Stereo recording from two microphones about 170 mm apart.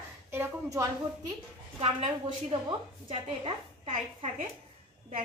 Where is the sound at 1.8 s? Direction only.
35° right (ahead or behind).